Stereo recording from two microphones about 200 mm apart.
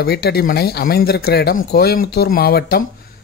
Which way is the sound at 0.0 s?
50° left (ahead or behind).